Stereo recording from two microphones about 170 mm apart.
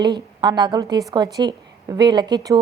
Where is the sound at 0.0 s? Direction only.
25° right (ahead or behind).